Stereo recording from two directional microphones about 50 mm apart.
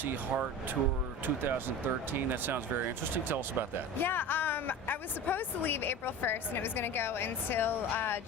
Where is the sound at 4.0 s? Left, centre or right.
Left.